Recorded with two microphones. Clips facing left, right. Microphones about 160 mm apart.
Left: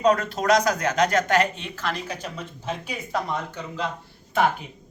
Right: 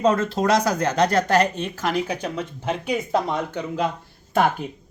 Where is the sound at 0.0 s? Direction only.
25° right (ahead or behind).